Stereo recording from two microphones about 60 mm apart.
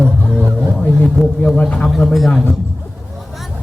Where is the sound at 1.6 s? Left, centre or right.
Centre.